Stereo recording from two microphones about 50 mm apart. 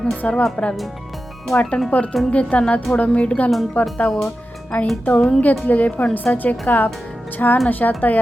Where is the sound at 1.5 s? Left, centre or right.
Left.